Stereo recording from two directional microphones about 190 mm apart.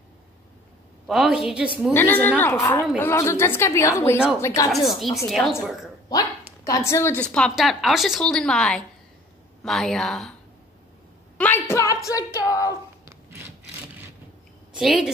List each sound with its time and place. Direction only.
1.0 s speech: centre (ahead or behind)
2.0 s a woman's voice: 10° left (ahead or behind)
5.0 s speech: centre (ahead or behind)
6.0 s speech: 20° left (ahead or behind); by 10.3 s centre (ahead or behind)
11.3 s a woman's voice: 10° left (ahead or behind)
14.7 s a woman's voice: 5° right (ahead or behind)